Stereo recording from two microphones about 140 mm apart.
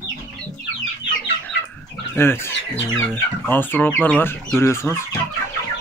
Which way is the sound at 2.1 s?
15° left (ahead or behind).